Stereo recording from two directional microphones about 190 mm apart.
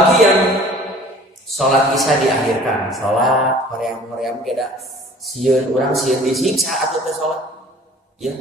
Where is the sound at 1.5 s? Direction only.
Centre (ahead or behind).